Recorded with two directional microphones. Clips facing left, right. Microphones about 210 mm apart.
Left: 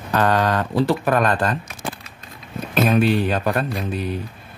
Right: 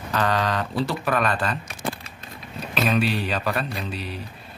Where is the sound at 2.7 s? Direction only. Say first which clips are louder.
Left 5 dB; 50° left (ahead or behind).